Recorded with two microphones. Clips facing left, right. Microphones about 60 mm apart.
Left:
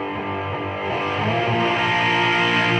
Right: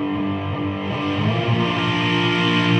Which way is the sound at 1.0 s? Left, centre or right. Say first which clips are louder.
Even; left.